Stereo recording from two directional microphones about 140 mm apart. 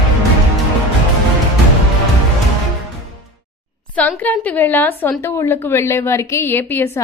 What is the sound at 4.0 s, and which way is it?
A woman's voice, 10° left (ahead or behind).